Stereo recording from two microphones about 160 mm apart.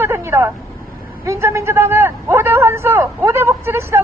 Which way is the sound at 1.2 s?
15° right (ahead or behind).